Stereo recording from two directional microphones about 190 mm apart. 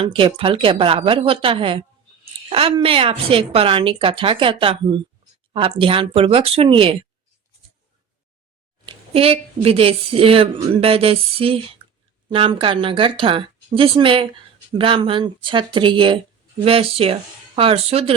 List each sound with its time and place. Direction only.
0.0 s a woman's voice: 25° right (ahead or behind)
8.9 s a woman's voice: 30° right (ahead or behind)